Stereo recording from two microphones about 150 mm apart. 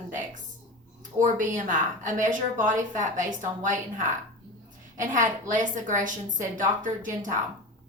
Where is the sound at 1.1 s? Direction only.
60° right (ahead or behind).